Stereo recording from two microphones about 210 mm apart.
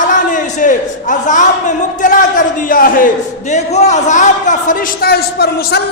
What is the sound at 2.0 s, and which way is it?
A man's voice, 40° left (ahead or behind).